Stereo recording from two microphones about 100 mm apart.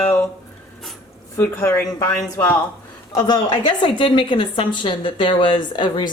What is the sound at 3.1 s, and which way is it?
A woman's voice, 45° left (ahead or behind).